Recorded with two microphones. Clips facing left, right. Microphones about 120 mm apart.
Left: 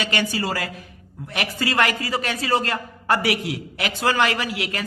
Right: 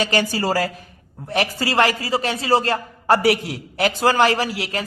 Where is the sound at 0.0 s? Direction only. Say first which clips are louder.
Right 4 dB; 35° right (ahead or behind).